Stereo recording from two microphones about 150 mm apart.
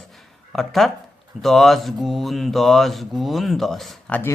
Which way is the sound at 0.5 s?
Centre (ahead or behind).